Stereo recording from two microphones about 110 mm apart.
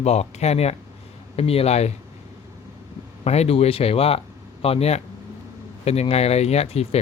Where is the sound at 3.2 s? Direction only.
70° left (ahead or behind).